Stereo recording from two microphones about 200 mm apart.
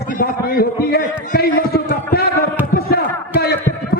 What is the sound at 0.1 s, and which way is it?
A man's voice, 45° left (ahead or behind).